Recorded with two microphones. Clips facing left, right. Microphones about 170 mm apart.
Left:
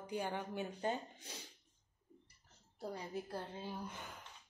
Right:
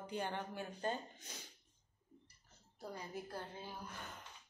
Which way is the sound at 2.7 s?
25° left (ahead or behind).